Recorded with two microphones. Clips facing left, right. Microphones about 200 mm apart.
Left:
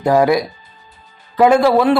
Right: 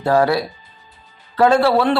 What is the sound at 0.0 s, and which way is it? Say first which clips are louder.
A man's voice: left 3 dB; 15° left (ahead or behind).